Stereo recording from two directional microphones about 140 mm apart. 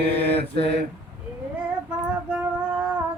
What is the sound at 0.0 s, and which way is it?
Mantra, 45° left (ahead or behind).